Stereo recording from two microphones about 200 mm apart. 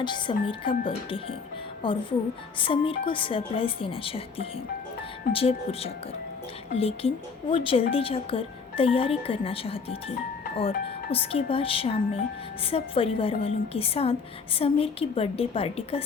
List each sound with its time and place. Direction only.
0.0 s speech: 25° left (ahead or behind)
11.1 s speech: 30° left (ahead or behind)